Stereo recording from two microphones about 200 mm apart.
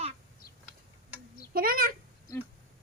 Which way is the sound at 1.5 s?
45° right (ahead or behind).